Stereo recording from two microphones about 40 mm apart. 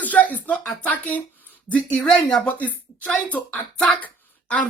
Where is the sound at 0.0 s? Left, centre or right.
Left.